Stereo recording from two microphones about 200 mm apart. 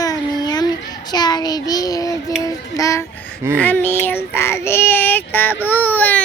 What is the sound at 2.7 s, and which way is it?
Child singing, 15° left (ahead or behind).